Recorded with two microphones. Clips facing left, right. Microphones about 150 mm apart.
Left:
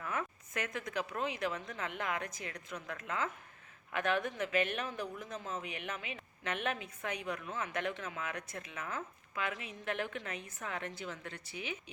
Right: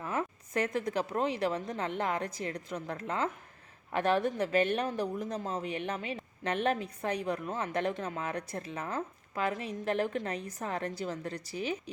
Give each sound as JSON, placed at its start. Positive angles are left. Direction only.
{"t": 0.0, "sound": "speech", "side_deg": -30}